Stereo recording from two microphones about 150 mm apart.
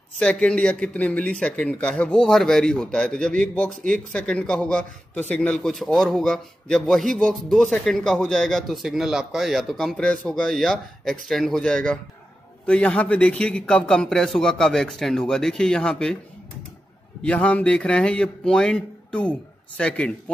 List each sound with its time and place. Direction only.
0.2 s a man's voice: 5° left (ahead or behind)
17.2 s speech: 10° left (ahead or behind)